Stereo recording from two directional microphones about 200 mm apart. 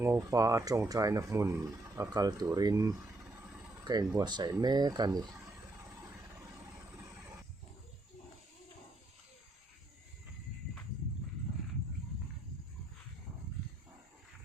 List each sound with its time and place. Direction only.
0.0 s speech: 15° right (ahead or behind)